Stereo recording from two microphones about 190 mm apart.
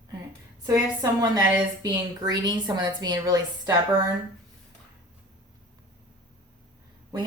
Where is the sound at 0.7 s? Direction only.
15° right (ahead or behind).